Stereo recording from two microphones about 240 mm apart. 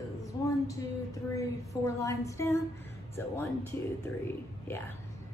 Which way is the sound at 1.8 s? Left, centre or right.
Centre.